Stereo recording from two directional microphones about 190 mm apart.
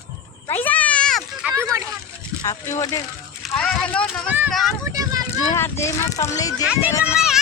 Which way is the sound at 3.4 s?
Centre (ahead or behind).